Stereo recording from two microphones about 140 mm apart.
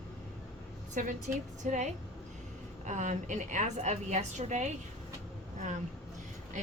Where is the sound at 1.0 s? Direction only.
75° right (ahead or behind).